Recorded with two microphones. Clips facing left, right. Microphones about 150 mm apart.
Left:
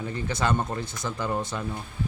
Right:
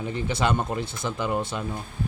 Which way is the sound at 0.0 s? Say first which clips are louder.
Right 2 dB; 20° right (ahead or behind).